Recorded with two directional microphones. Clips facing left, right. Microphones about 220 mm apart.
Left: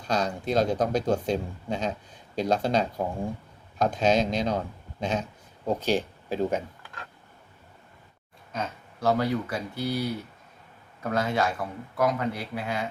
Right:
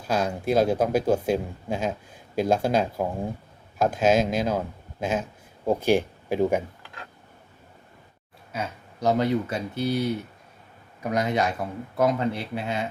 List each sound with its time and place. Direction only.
0.0 s speech: 5° right (ahead or behind)
8.5 s speech: 15° right (ahead or behind)